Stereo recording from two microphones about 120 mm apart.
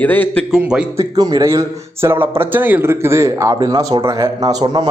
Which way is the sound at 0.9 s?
30° right (ahead or behind).